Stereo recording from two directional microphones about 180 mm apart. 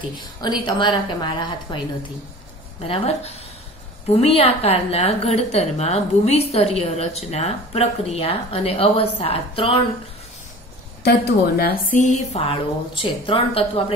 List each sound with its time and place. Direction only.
0.2 s a woman's voice: 25° left (ahead or behind)
2.8 s a woman's voice: 35° left (ahead or behind)
11.0 s a woman's voice: 60° left (ahead or behind)
12.0 s a woman's voice: 40° left (ahead or behind)